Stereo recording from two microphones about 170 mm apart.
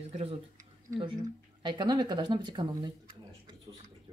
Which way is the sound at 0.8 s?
30° right (ahead or behind).